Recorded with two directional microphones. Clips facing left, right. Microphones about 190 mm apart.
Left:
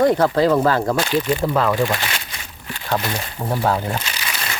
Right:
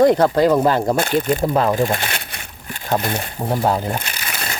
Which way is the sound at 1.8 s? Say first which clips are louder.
Right 1 dB; 50° right (ahead or behind).